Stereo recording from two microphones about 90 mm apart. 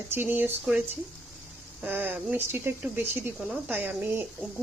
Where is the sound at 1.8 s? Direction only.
20° right (ahead or behind).